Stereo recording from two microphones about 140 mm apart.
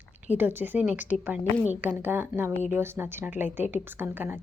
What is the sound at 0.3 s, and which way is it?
Speech, 15° right (ahead or behind).